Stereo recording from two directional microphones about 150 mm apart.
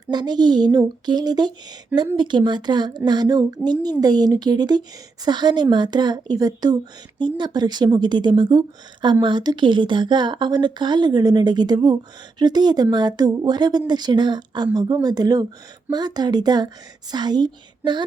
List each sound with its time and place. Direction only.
0.1 s a woman's voice: 30° right (ahead or behind)